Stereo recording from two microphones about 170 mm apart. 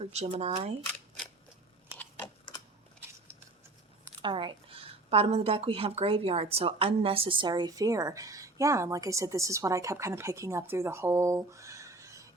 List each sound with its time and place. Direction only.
0.0 s speech: 40° right (ahead or behind)
0.9 s a sound: 5° left (ahead or behind)
4.2 s speech: 30° right (ahead or behind)